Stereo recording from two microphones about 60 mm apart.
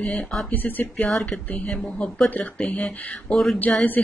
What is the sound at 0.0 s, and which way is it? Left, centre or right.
Speech, centre.